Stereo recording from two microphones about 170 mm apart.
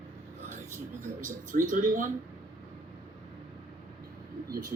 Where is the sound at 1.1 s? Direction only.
50° right (ahead or behind).